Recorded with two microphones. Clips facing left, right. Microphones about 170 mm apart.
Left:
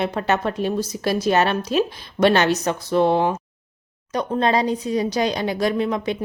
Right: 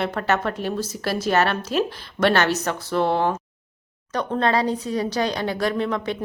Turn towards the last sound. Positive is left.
turn(degrees=15)  # may be behind; listen again after turning